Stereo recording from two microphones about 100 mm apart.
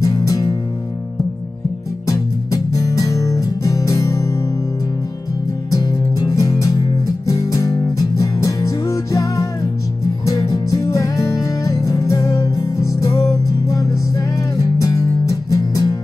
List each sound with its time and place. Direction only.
0.0 s music: 35° left (ahead or behind)
2.0 s music: 35° left (ahead or behind)
5.7 s music: 35° left (ahead or behind)